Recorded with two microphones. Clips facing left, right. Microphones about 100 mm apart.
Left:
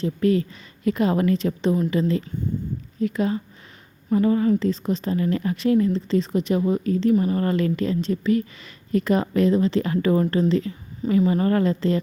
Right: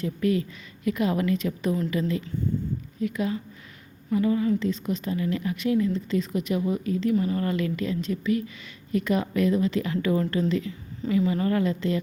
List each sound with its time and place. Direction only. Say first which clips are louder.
0.0 s a woman's voice: left 4 dB; 35° left (ahead or behind)